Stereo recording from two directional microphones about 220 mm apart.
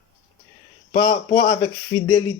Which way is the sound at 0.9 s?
15° left (ahead or behind).